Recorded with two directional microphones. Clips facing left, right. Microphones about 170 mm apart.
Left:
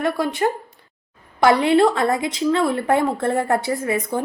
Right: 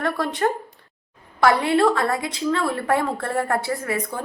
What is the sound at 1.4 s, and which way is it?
A woman's voice, 20° left (ahead or behind).